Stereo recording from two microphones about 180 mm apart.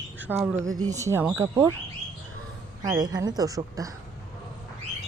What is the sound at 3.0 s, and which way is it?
Speech, 20° right (ahead or behind).